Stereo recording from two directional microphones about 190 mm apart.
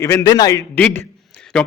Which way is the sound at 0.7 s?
10° left (ahead or behind).